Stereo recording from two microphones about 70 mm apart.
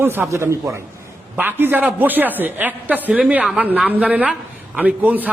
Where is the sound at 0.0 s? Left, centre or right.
Right.